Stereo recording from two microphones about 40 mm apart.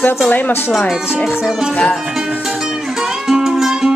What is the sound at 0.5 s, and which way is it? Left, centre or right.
Speech, left.